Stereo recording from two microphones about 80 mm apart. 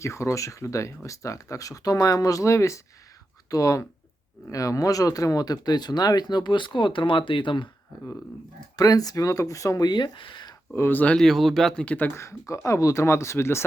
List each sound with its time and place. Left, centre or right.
0.0 s speech: left
8.7 s speech: left
10.8 s speech: left
11.2 s speech: centre
11.7 s speech: centre
12.1 s speech: left